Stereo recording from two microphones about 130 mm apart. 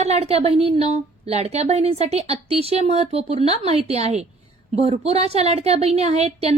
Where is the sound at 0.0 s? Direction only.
55° right (ahead or behind).